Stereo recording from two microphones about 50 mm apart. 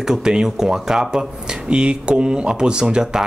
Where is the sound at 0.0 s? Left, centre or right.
Centre.